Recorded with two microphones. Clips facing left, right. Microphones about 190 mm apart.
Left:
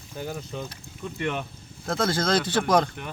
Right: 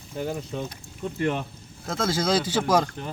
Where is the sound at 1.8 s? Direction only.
5° right (ahead or behind).